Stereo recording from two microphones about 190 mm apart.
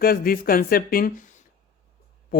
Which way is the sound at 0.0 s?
50° left (ahead or behind).